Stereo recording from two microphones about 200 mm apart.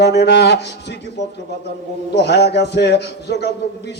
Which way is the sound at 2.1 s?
55° left (ahead or behind).